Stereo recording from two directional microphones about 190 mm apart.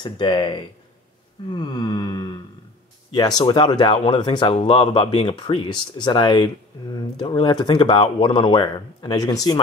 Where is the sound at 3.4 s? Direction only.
25° left (ahead or behind).